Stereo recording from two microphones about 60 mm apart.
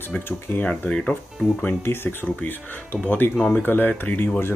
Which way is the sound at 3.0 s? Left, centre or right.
Left.